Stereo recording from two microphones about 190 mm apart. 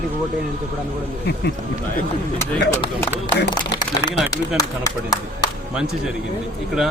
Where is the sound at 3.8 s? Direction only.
20° left (ahead or behind).